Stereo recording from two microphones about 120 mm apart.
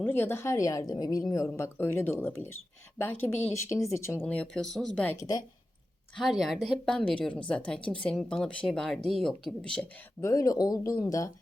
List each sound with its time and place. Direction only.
0.0 s a woman's voice: 20° left (ahead or behind)
1.5 s a woman's voice: 20° left (ahead or behind)
5.1 s speech: 35° left (ahead or behind)
6.1 s a woman's voice: centre (ahead or behind)
10.2 s speech: 25° left (ahead or behind)